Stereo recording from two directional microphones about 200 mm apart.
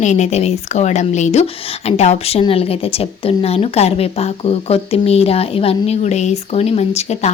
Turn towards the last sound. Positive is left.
turn(degrees=35)  # may be behind; listen again after turning